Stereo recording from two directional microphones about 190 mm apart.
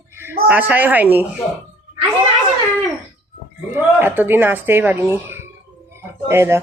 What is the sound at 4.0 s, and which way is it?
Speech, 10° right (ahead or behind).